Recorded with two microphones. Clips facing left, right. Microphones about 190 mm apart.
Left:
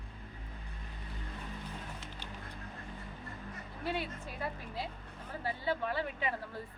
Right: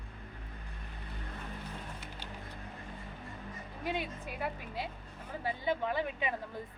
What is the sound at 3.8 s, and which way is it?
A woman's voice, 15° right (ahead or behind).